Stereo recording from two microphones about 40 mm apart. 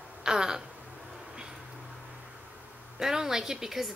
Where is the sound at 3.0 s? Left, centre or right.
Centre.